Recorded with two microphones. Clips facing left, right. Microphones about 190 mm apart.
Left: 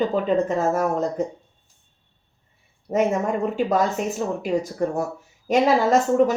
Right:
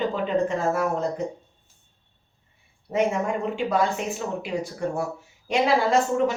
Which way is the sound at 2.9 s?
40° left (ahead or behind).